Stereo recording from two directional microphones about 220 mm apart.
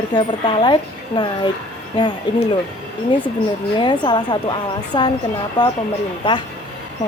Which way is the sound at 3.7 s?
20° left (ahead or behind).